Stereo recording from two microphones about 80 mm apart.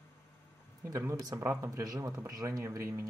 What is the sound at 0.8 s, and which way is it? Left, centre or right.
Speech, right.